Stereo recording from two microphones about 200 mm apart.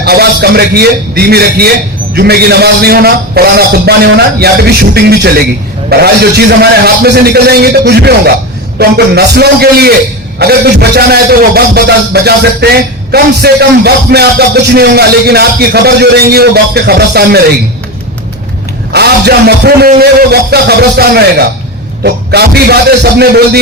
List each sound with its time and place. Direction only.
0.0 s a man's voice: 50° right (ahead or behind)
18.9 s a man's voice: 55° right (ahead or behind)